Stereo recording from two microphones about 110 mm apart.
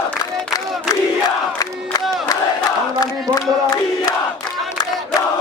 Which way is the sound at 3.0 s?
35° left (ahead or behind).